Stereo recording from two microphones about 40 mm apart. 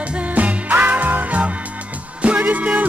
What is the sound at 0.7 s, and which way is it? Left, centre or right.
Music, right.